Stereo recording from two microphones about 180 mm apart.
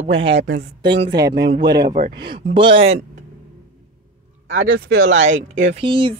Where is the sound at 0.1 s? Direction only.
30° right (ahead or behind).